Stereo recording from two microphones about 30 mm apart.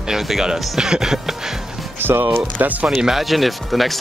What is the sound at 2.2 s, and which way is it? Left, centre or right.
Speech, right.